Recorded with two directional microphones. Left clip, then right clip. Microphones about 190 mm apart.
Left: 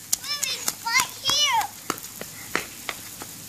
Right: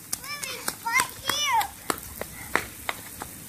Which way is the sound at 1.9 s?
45° left (ahead or behind).